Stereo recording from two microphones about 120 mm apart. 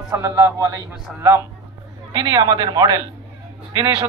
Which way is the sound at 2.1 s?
30° right (ahead or behind).